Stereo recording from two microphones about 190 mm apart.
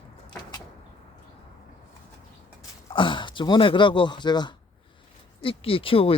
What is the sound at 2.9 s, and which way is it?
Speech, 25° left (ahead or behind).